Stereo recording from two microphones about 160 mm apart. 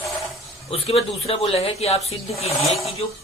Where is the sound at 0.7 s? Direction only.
40° left (ahead or behind).